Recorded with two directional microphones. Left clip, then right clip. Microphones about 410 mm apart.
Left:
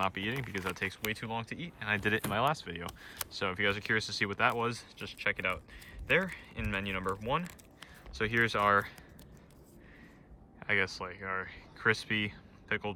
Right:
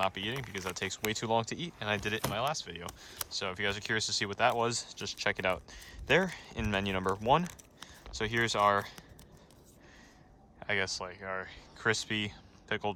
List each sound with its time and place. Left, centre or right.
0.0 s speech: centre
10.6 s speech: centre